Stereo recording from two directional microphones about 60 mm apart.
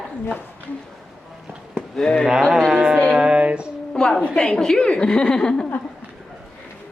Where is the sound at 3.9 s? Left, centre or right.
Centre.